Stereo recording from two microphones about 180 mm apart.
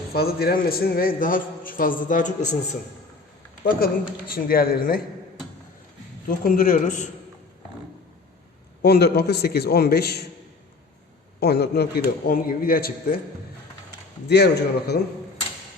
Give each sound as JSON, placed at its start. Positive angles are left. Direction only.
{"t": 0.1, "sound": "a man's voice", "side_deg": 60}
{"t": 4.3, "sound": "a man's voice", "side_deg": 55}
{"t": 6.2, "sound": "a man's voice", "side_deg": 55}
{"t": 8.8, "sound": "a man's voice", "side_deg": 65}
{"t": 11.3, "sound": "a man's voice", "side_deg": 65}
{"t": 14.3, "sound": "a man's voice", "side_deg": 65}